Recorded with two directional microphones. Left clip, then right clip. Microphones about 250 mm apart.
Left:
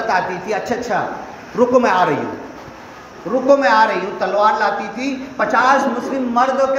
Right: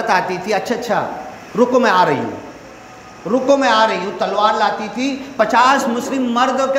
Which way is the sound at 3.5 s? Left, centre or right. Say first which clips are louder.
Left 1 dB; right.